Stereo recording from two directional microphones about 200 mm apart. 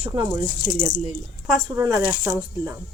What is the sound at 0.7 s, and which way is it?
Speech, 40° left (ahead or behind).